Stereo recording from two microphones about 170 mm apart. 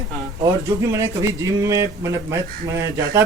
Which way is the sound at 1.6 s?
20° right (ahead or behind).